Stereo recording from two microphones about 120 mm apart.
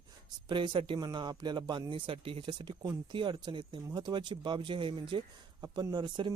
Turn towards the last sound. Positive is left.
turn(degrees=-40)  # may be behind; listen again after turning